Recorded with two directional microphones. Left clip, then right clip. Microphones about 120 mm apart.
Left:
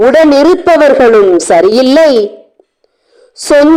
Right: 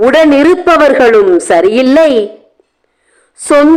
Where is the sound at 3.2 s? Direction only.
20° left (ahead or behind).